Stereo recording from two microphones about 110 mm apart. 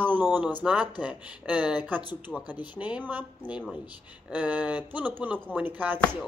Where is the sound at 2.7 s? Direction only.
15° right (ahead or behind).